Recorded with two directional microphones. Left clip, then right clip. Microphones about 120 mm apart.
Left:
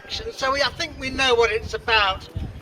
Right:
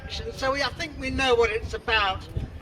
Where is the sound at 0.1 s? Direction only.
30° left (ahead or behind).